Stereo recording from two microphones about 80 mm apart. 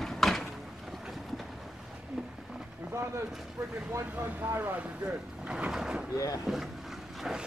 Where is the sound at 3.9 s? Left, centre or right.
Right.